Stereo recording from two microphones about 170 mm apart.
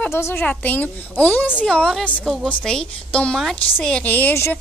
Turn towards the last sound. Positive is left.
turn(degrees=10)  # may be behind; listen again after turning